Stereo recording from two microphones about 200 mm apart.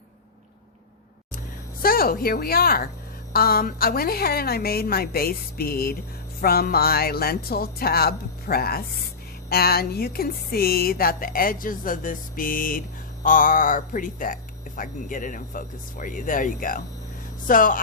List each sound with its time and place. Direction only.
1.8 s speech: 45° left (ahead or behind)